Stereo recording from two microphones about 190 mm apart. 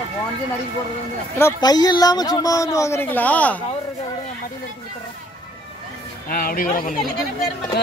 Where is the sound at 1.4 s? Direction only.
20° left (ahead or behind).